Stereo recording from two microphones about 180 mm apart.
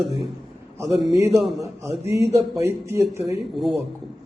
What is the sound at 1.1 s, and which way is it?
A man's voice, 15° right (ahead or behind).